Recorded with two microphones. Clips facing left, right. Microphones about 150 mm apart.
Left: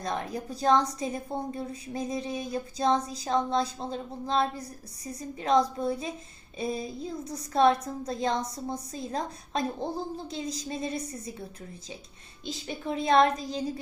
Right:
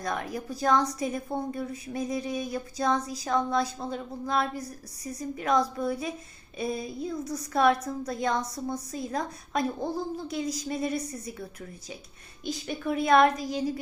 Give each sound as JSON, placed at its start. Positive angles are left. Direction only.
{"t": 0.0, "sound": "a woman's voice", "side_deg": 30}
{"t": 12.5, "sound": "a woman's voice", "side_deg": 25}